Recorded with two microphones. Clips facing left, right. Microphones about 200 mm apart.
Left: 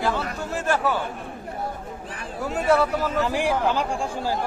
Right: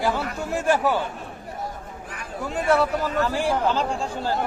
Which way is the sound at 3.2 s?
15° left (ahead or behind).